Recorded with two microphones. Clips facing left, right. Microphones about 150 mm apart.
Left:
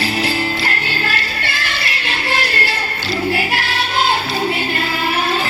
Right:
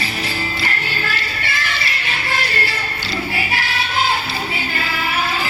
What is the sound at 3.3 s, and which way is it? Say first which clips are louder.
Choir: left 5 dB; 65° left (ahead or behind).